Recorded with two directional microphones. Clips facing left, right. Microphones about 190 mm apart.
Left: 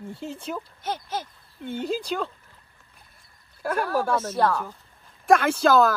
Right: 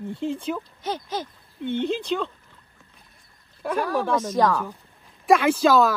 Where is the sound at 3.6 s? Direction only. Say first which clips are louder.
Right 1 dB; 5° left (ahead or behind).